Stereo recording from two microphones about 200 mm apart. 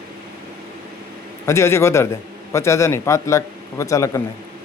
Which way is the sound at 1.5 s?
15° left (ahead or behind).